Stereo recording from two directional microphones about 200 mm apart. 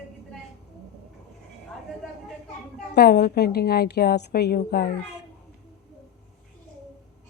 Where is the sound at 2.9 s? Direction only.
55° left (ahead or behind).